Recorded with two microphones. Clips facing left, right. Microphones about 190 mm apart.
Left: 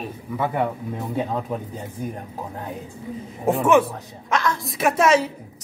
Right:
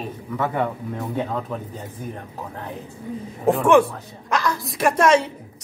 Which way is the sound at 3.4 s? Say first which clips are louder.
Right 2 dB; centre (ahead or behind).